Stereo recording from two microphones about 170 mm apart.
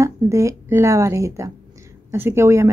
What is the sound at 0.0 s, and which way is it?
Speech, 20° right (ahead or behind).